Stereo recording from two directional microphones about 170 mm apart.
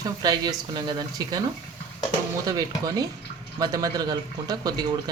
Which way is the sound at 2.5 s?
20° right (ahead or behind).